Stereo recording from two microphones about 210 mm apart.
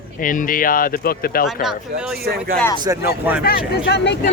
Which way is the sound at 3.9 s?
55° left (ahead or behind).